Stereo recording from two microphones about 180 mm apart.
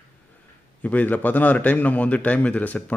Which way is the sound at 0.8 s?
10° left (ahead or behind).